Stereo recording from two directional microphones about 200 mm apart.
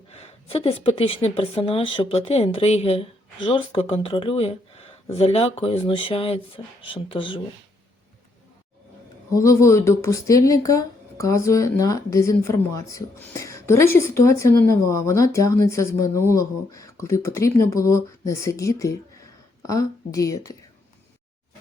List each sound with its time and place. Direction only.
0.1 s a woman's voice: 30° left (ahead or behind)
9.3 s speech: 15° left (ahead or behind)